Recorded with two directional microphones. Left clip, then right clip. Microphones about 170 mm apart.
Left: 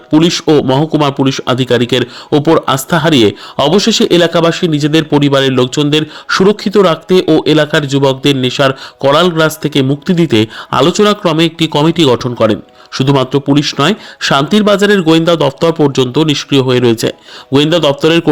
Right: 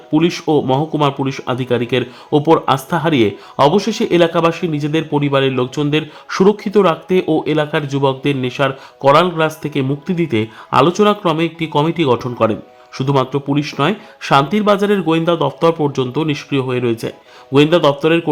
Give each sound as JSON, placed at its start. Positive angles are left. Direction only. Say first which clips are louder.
{"t": 0.1, "sound": "speech", "louder": "left 6 dB", "side_deg": 30}